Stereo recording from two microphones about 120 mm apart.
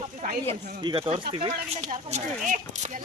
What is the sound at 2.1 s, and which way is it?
Speech, 65° right (ahead or behind).